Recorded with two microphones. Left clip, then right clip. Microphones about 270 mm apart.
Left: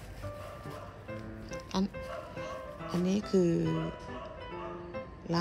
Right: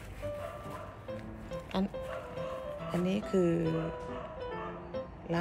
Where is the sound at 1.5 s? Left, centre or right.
Centre.